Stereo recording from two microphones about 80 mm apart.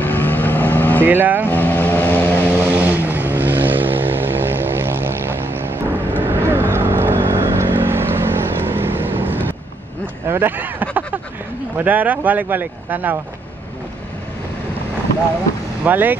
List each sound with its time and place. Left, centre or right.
0.0 s vehicle: left
1.0 s speech: right
1.5 s vehicle: left
2.6 s vehicle: right
10.2 s a sound: right
11.8 s speech: right
15.8 s speech: right